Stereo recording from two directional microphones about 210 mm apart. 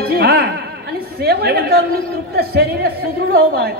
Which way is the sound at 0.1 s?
50° right (ahead or behind).